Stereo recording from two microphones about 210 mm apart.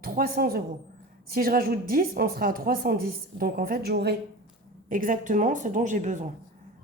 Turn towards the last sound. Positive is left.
turn(degrees=-35)  # may be behind; listen again after turning